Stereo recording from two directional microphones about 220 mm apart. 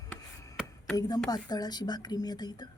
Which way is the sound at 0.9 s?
20° left (ahead or behind).